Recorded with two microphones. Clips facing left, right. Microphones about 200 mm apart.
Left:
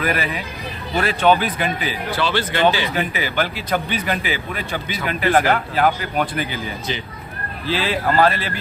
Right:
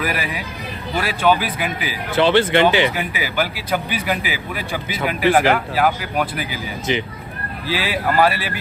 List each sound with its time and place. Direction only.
0.0 s speech: 10° right (ahead or behind)
2.1 s speech: 25° right (ahead or behind)
2.9 s speech: 10° right (ahead or behind)
7.7 s speech: 10° right (ahead or behind)